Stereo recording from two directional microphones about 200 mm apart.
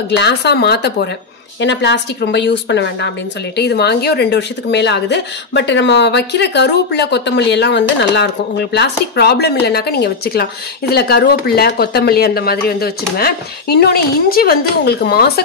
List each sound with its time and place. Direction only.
0.1 s speech: 55° left (ahead or behind)